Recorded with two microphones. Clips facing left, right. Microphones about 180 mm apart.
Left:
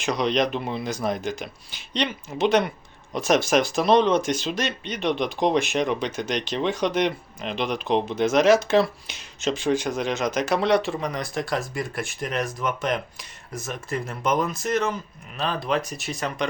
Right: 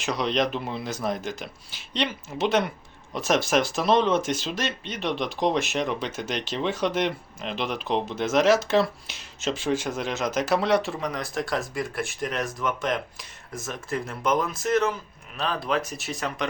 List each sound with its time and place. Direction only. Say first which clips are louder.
0.0 s speech: left 2 dB; centre (ahead or behind)